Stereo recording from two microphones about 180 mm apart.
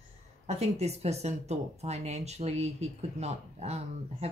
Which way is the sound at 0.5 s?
35° right (ahead or behind).